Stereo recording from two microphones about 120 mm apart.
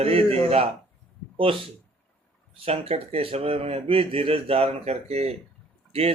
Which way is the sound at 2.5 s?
55° right (ahead or behind).